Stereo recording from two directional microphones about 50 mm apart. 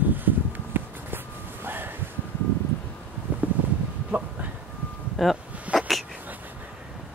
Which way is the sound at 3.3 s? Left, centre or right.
Right.